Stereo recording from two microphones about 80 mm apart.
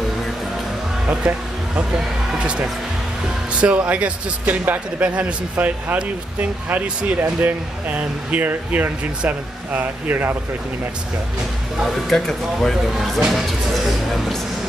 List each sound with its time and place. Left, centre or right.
1.3 s speech: centre
11.8 s speech: centre